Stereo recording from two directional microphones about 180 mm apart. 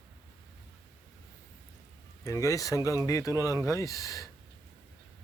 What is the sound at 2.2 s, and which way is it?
Speech, 20° left (ahead or behind).